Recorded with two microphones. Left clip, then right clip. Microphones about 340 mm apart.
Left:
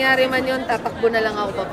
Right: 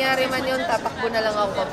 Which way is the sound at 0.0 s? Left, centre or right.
Centre.